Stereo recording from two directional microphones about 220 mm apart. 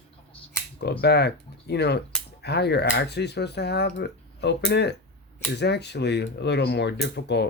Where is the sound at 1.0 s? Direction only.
45° left (ahead or behind).